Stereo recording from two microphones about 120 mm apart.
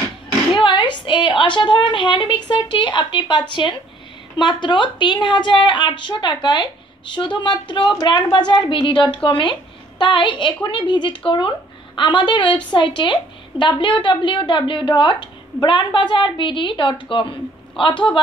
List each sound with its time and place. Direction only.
0.6 s a woman's voice: 40° left (ahead or behind)